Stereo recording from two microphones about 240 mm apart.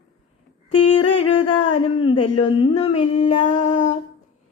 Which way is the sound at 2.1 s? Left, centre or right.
Left.